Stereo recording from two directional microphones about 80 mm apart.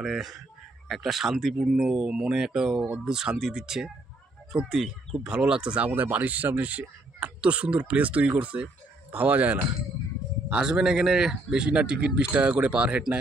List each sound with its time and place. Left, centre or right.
0.0 s speech: centre
1.8 s speech: centre
10.5 s speech: centre